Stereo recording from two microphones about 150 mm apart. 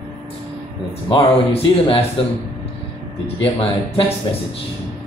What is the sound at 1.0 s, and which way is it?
Speech, 40° left (ahead or behind).